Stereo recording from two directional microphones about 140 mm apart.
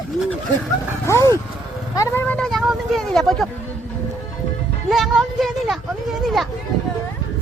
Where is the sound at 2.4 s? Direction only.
Centre (ahead or behind).